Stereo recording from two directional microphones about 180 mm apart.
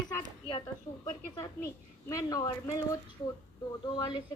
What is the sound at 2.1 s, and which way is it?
Speech, 20° left (ahead or behind).